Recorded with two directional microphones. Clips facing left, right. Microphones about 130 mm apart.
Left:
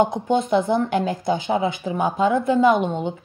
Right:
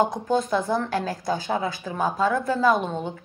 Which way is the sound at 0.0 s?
25° left (ahead or behind).